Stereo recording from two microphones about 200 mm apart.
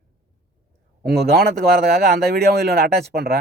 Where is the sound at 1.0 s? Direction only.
55° right (ahead or behind).